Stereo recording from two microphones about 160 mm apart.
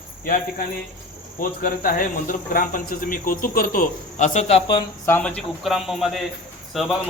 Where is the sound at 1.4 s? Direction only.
60° left (ahead or behind); by 4.6 s 45° left (ahead or behind).